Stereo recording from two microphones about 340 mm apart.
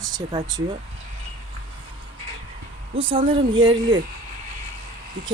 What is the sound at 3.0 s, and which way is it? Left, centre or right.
Speech, centre.